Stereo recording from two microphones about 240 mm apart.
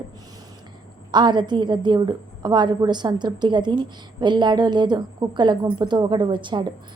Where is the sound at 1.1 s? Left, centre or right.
Centre.